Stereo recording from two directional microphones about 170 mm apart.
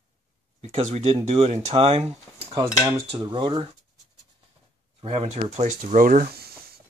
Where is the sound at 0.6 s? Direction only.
40° right (ahead or behind).